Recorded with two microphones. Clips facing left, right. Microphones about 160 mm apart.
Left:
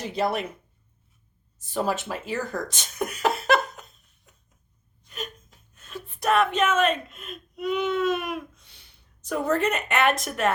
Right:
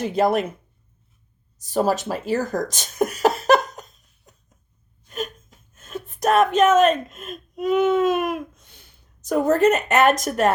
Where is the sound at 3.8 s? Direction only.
40° right (ahead or behind).